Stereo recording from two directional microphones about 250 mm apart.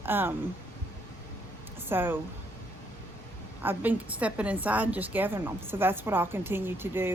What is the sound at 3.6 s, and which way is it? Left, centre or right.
A woman's voice, centre.